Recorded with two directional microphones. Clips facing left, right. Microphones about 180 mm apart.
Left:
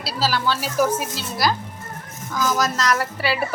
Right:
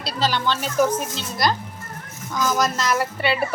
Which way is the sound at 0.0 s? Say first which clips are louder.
Even; 5° left (ahead or behind).